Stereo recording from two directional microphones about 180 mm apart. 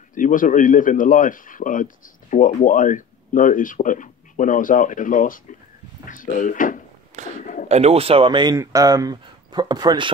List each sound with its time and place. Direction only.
0.1 s speech: 50° left (ahead or behind)
7.2 s a sound: 40° right (ahead or behind)
7.6 s speech: 35° right (ahead or behind)